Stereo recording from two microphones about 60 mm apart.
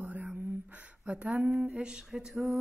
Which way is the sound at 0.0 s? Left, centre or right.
Right.